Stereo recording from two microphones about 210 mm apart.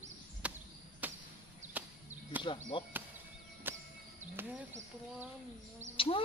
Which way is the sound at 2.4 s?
25° left (ahead or behind).